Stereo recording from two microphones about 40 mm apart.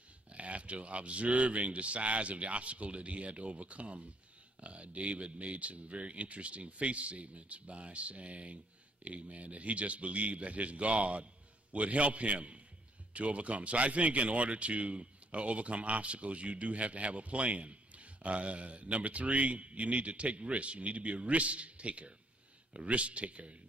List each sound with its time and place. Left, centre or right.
0.3 s speech: right